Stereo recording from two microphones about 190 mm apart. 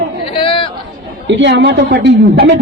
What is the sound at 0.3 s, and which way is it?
Chatter, 30° left (ahead or behind).